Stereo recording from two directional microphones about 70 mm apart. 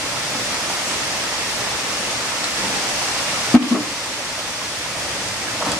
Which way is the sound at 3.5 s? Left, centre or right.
Centre.